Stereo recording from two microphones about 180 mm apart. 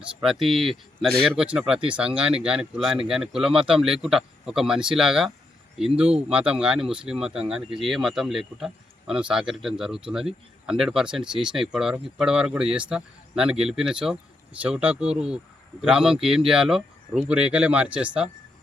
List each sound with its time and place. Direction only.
0.2 s speech: centre (ahead or behind)
6.1 s speech: 35° right (ahead or behind)
6.3 s speech: 5° right (ahead or behind)